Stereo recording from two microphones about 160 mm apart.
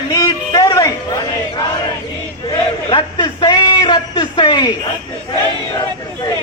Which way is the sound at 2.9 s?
25° left (ahead or behind).